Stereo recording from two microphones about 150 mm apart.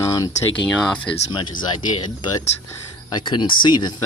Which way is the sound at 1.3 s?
30° left (ahead or behind).